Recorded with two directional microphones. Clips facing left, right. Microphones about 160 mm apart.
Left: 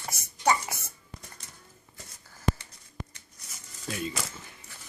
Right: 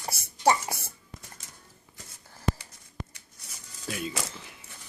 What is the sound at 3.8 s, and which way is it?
Speech, 5° right (ahead or behind).